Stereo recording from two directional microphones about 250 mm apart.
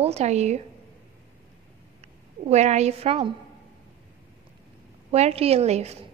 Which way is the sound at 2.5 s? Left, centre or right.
Right.